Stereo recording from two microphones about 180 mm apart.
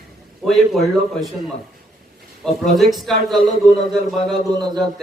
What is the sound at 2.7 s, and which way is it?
Speech, centre (ahead or behind).